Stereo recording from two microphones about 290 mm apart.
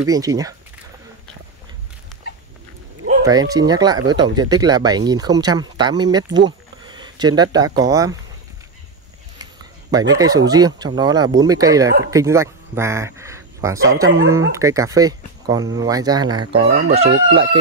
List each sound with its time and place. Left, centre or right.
0.0 s speech: centre
3.3 s speech: centre
9.4 s speech: centre